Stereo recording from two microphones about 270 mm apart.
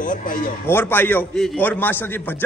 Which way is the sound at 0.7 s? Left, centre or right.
Centre.